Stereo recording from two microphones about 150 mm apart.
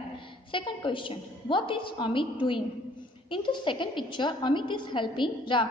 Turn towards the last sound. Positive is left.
turn(degrees=30)  # may be behind; listen again after turning